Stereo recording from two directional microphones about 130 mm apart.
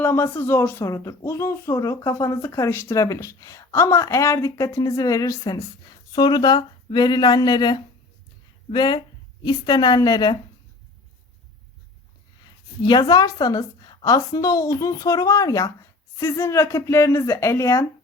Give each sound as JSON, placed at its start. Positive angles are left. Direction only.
{"t": 0.0, "sound": "a woman's voice", "side_deg": 15}
{"t": 12.8, "sound": "a woman's voice", "side_deg": 35}